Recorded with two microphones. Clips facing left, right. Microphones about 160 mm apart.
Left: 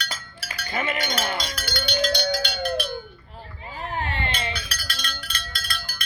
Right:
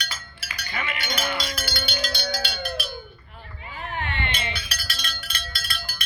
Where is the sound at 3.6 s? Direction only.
35° left (ahead or behind).